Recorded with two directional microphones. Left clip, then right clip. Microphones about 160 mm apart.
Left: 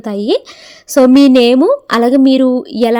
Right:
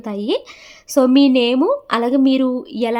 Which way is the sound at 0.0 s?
35° left (ahead or behind).